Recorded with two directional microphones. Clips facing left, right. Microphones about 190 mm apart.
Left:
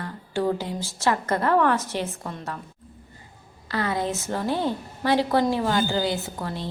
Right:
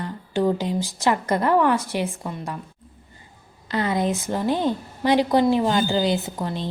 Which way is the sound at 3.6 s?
20° right (ahead or behind).